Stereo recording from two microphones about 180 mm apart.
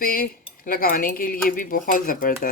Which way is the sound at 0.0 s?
50° left (ahead or behind).